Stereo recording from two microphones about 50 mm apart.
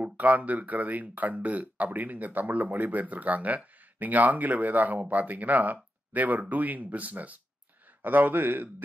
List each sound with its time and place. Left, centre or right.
0.0 s speech: right